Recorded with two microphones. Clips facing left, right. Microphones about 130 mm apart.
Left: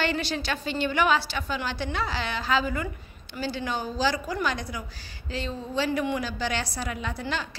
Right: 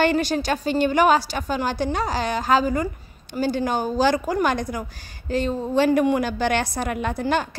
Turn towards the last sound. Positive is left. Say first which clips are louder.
# right 8 dB
turn(degrees=-50)  # may be behind; listen again after turning